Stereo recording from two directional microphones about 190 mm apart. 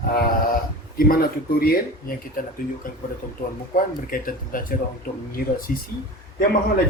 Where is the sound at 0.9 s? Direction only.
50° left (ahead or behind).